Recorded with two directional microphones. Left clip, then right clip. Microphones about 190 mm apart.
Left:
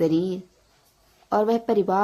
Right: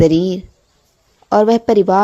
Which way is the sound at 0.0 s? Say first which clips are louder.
Right 10 dB; 35° right (ahead or behind).